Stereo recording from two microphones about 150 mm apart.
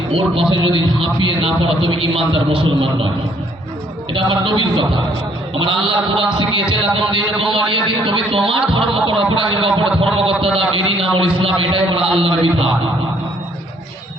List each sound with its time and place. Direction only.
0.1 s a man's voice: 40° right (ahead or behind)
4.1 s a man's voice: 35° right (ahead or behind)